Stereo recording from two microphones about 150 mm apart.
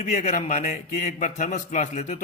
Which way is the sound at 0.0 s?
50° left (ahead or behind).